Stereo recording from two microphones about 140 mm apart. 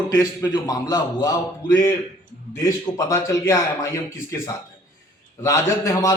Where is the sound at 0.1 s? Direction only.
25° left (ahead or behind).